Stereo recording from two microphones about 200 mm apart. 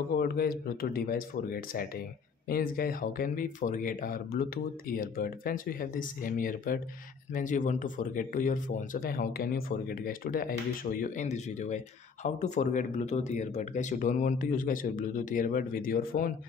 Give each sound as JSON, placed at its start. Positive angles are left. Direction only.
{"t": 0.2, "sound": "speech", "side_deg": 50}